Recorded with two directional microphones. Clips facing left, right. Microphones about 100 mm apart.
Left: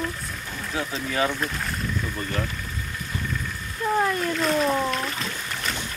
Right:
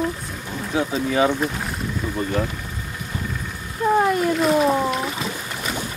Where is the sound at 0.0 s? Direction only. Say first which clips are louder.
Right 5 dB; 25° right (ahead or behind).